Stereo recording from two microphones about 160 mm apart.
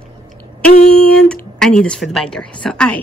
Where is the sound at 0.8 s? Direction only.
5° left (ahead or behind).